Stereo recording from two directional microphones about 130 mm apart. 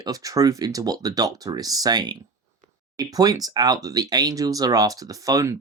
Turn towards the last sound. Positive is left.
turn(degrees=-25)  # may be behind; listen again after turning